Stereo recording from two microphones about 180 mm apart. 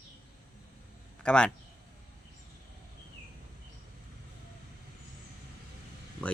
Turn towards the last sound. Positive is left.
turn(degrees=5)  # may be behind; listen again after turning